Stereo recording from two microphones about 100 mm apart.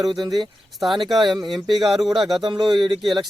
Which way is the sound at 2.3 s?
50° right (ahead or behind).